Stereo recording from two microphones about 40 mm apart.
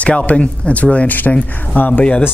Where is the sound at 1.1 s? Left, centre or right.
Left.